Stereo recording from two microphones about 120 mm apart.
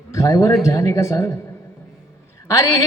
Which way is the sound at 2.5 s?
25° left (ahead or behind).